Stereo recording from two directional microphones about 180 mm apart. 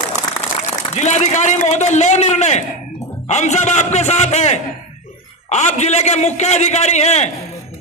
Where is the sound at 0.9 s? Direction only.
40° left (ahead or behind).